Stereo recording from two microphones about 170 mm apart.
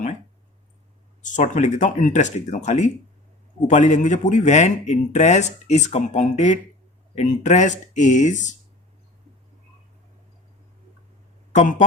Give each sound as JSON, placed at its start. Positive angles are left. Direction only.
{"t": 1.2, "sound": "speech", "side_deg": 45}
{"t": 11.5, "sound": "speech", "side_deg": 45}